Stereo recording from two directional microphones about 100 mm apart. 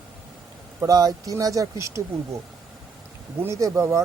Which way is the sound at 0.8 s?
40° right (ahead or behind).